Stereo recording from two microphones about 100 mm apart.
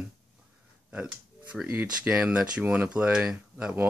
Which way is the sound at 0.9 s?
10° right (ahead or behind).